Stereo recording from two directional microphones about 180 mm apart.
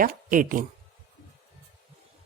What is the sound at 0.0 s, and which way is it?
Speech, 50° right (ahead or behind).